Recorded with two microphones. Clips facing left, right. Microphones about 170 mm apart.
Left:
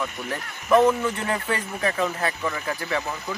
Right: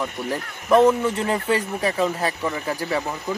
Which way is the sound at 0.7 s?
10° right (ahead or behind).